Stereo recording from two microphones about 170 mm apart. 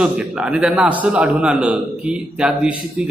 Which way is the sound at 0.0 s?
5° right (ahead or behind).